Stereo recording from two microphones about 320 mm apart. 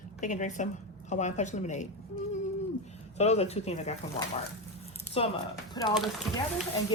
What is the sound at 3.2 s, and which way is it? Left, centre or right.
Speech, centre.